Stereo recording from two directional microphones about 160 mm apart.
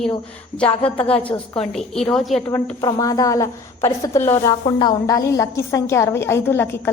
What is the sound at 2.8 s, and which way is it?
A woman's voice, 20° left (ahead or behind).